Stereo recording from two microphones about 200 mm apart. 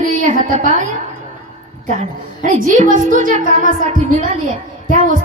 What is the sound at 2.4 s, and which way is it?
A woman's voice, 40° right (ahead or behind).